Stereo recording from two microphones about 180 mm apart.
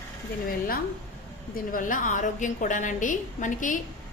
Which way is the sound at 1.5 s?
50° left (ahead or behind).